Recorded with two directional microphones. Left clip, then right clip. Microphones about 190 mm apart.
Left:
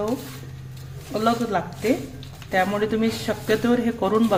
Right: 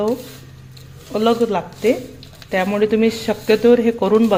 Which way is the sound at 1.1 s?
30° right (ahead or behind).